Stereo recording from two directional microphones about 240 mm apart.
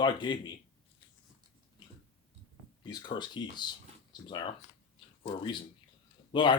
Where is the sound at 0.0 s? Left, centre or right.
Centre.